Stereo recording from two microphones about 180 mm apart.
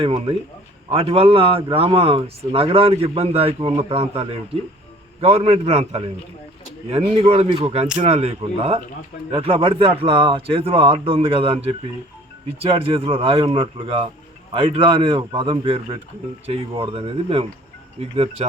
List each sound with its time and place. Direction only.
0.0 s a man's voice: 30° right (ahead or behind)